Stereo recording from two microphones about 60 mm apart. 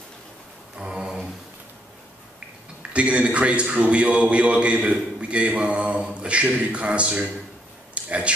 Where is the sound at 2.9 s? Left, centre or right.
Right.